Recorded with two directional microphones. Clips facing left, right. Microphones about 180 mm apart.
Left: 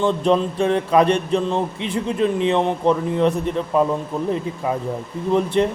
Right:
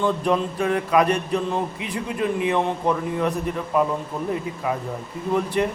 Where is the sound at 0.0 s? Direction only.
25° left (ahead or behind).